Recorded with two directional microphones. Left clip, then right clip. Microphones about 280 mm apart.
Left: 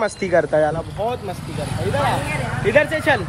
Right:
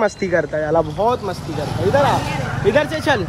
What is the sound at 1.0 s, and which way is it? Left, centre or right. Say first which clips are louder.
Speech: right 3 dB; right.